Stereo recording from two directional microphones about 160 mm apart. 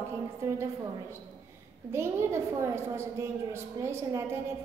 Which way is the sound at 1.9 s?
15° right (ahead or behind).